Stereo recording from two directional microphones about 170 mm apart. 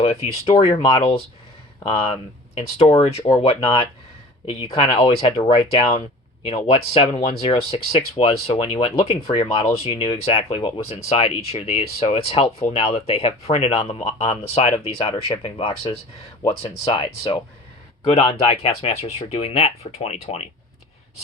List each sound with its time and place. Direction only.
0.0 s speech: 35° left (ahead or behind)